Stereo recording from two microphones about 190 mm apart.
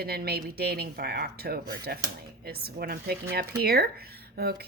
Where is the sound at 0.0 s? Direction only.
55° right (ahead or behind).